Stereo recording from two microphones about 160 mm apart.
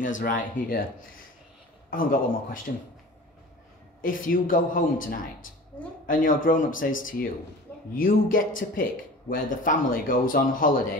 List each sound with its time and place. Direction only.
0.0 s speech: 55° left (ahead or behind)
1.9 s speech: 60° left (ahead or behind)
4.0 s speech: 60° left (ahead or behind)